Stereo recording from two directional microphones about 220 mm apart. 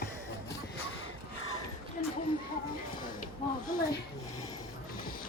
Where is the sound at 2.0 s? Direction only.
35° left (ahead or behind).